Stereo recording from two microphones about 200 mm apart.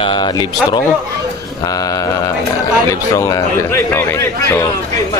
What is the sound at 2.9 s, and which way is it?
Speech, 15° left (ahead or behind).